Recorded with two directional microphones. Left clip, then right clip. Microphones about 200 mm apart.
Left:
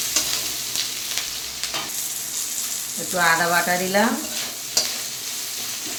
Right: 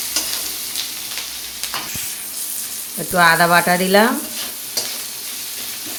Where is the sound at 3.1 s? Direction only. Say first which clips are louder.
Right 6 dB; 55° right (ahead or behind).